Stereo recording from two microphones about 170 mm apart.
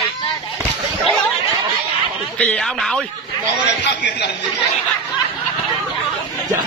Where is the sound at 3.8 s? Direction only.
85° left.